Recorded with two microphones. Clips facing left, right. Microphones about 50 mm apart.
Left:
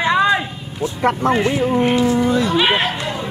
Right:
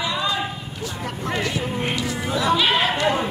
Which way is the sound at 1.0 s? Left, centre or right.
Left.